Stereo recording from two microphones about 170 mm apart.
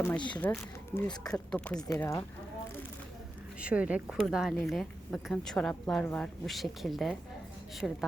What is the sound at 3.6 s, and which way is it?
A woman's voice, 5° right (ahead or behind).